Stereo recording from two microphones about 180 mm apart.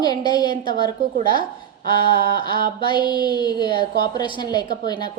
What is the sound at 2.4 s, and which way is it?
Speech, 25° left (ahead or behind).